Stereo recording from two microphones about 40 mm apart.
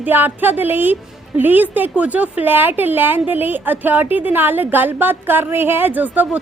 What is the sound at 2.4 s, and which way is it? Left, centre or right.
A woman's voice, right.